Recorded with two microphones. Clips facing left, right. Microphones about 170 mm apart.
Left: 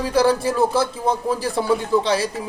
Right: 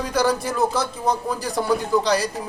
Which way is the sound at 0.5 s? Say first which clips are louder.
Left 3 dB; 30° left (ahead or behind).